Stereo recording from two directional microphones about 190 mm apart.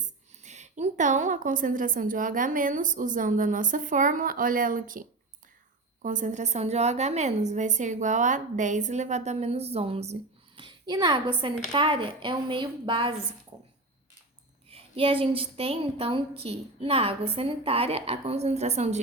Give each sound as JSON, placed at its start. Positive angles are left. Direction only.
{"t": 0.0, "sound": "a woman's voice", "side_deg": -40}
{"t": 14.7, "sound": "a woman's voice", "side_deg": -30}